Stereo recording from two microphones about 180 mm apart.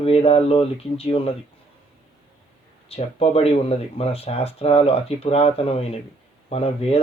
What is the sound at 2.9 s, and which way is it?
Speech, 35° left (ahead or behind).